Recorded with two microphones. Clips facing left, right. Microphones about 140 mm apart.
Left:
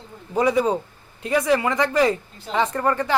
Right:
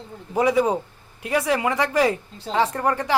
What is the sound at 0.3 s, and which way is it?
Speech, 10° right (ahead or behind).